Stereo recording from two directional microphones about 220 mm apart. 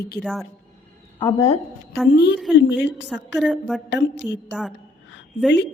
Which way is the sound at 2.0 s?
50° left (ahead or behind).